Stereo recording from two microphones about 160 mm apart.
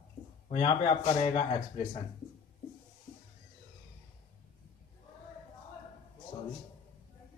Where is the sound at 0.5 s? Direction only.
40° left (ahead or behind).